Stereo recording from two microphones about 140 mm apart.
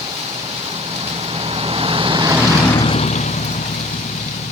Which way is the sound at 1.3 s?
40° right (ahead or behind).